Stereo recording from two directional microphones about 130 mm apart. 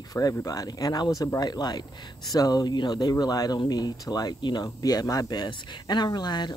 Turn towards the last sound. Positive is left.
turn(degrees=35)  # may be behind; listen again after turning